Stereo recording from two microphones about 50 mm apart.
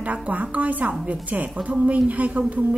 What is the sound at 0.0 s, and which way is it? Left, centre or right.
A woman's voice, right.